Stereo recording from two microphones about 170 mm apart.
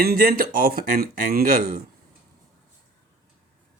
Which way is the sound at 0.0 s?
60° right (ahead or behind).